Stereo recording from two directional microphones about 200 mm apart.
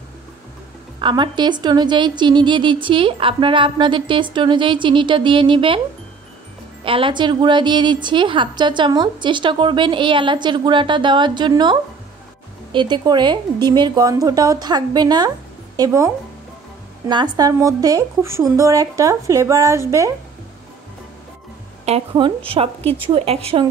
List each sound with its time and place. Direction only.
0.9 s a woman's voice: 25° right (ahead or behind)
6.8 s a woman's voice: 25° right (ahead or behind)
17.1 s a woman's voice: 20° right (ahead or behind)
22.1 s a woman's voice: 25° right (ahead or behind)